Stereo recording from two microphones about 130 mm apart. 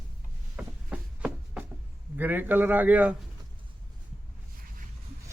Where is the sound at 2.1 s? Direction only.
15° right (ahead or behind).